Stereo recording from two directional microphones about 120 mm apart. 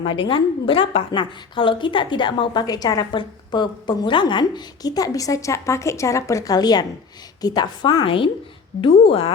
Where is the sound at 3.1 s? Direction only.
40° left (ahead or behind).